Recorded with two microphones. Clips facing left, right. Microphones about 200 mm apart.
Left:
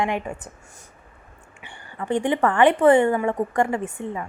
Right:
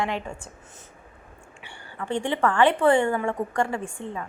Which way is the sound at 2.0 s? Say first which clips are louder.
Left 3 dB; 20° left (ahead or behind).